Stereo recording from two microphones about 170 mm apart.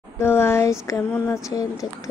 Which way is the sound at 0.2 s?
15° left (ahead or behind).